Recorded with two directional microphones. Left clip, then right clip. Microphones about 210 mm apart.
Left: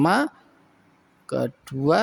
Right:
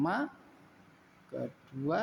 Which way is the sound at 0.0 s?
50° left (ahead or behind).